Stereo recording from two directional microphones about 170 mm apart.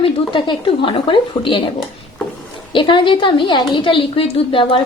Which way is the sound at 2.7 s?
30° left (ahead or behind).